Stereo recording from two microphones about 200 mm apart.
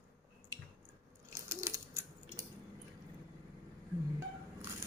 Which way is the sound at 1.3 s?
15° right (ahead or behind).